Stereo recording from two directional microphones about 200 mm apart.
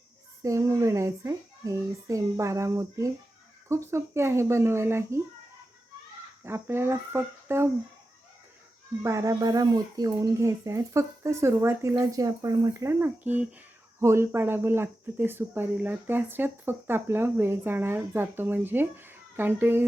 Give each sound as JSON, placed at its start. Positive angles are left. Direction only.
{"t": 0.4, "sound": "speech", "side_deg": -15}
{"t": 6.4, "sound": "speech", "side_deg": -10}
{"t": 9.0, "sound": "speech", "side_deg": -15}